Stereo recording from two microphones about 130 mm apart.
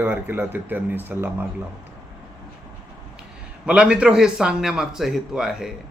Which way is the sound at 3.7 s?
10° right (ahead or behind).